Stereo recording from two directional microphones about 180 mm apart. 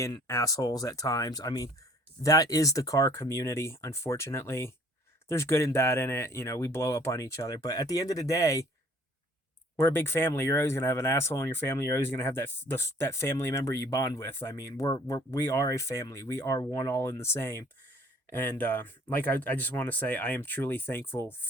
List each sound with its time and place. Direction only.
0.0 s speech: 15° left (ahead or behind)
9.7 s speech: 10° left (ahead or behind)